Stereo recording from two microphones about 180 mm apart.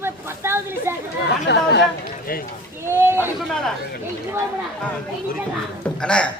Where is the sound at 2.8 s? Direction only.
10° right (ahead or behind).